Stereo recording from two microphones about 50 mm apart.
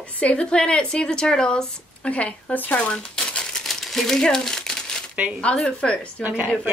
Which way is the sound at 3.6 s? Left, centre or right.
Centre.